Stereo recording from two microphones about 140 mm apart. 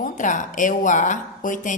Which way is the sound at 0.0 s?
65° left (ahead or behind).